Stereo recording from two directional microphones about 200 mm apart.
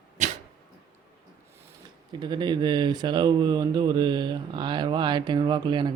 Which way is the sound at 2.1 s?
20° right (ahead or behind).